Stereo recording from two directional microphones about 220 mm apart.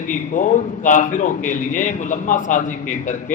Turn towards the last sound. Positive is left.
turn(degrees=35)  # may be behind; listen again after turning